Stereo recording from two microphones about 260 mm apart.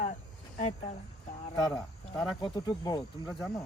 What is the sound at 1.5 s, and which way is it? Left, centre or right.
Speech, centre.